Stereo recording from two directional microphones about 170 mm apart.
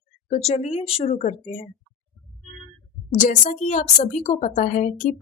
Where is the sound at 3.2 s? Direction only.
50° left (ahead or behind).